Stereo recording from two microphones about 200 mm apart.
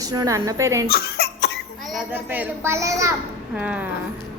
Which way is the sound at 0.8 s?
50° left (ahead or behind).